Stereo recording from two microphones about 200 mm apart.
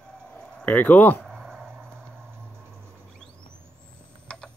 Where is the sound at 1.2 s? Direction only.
Centre (ahead or behind).